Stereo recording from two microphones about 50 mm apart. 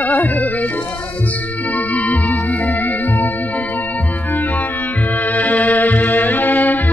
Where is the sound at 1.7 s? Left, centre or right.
Left.